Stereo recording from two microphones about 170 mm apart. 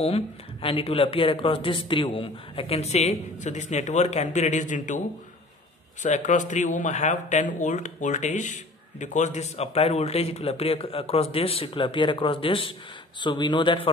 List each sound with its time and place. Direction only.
0.0 s speech: 35° left (ahead or behind)
6.0 s speech: 45° left (ahead or behind); by 13.8 s 25° left (ahead or behind)